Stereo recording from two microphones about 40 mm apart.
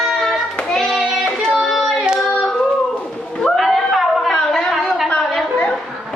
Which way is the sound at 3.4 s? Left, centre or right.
Centre.